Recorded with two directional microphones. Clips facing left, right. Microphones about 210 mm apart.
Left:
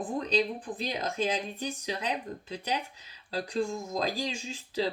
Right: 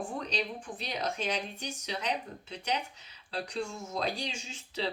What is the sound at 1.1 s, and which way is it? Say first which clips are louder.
Speech: left 4 dB; 35° left (ahead or behind).